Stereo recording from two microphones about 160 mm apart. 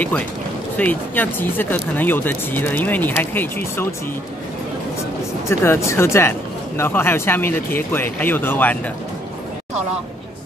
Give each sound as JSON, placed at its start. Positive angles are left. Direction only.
{"t": 0.7, "sound": "speech", "side_deg": 10}
{"t": 5.5, "sound": "speech", "side_deg": 15}